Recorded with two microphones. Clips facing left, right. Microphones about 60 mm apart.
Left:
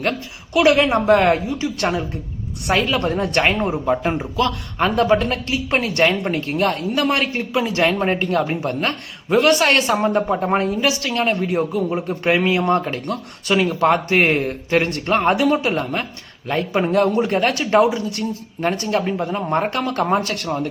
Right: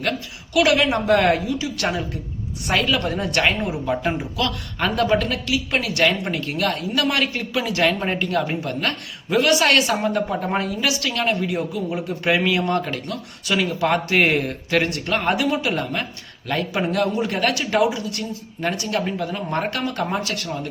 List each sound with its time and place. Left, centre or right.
0.0 s speech: left
3.8 s speech: left
20.0 s speech: left